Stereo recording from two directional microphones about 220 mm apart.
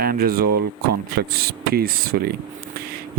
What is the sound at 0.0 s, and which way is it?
Speech, 40° right (ahead or behind).